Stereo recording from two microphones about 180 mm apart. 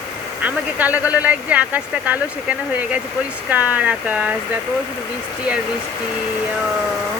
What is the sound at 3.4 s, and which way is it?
Speech, 10° right (ahead or behind).